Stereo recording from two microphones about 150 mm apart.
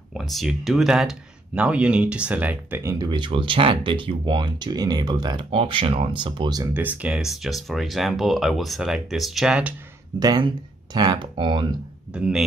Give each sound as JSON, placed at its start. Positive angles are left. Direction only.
{"t": 0.1, "sound": "speech", "side_deg": 0}
{"t": 3.1, "sound": "speech", "side_deg": -35}
{"t": 6.7, "sound": "speech", "side_deg": -10}
{"t": 10.1, "sound": "speech", "side_deg": -30}
{"t": 12.1, "sound": "speech", "side_deg": -5}